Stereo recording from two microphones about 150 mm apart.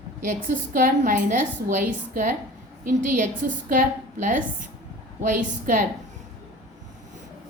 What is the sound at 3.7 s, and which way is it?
A woman's voice, 60° right (ahead or behind).